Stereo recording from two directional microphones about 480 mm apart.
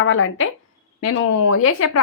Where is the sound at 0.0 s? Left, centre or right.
Left.